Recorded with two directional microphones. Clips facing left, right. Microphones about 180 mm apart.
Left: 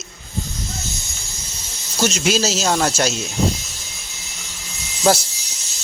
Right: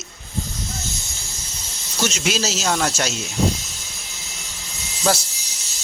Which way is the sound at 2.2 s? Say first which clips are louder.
Left 3 dB; 40° left (ahead or behind).